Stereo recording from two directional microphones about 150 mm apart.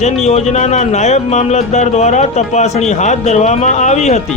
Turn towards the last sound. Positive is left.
turn(degrees=50)  # may be behind; listen again after turning